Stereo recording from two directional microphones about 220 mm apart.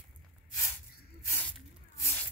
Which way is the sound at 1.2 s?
10° left (ahead or behind).